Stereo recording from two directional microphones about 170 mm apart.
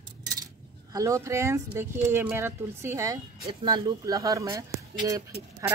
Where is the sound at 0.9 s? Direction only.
20° right (ahead or behind).